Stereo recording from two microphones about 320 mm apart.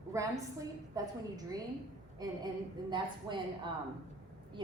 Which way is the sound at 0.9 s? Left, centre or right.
Centre.